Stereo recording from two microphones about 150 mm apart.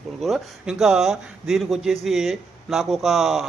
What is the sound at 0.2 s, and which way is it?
Speech, centre (ahead or behind).